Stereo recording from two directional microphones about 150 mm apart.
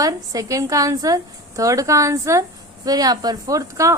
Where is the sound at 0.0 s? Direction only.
25° right (ahead or behind).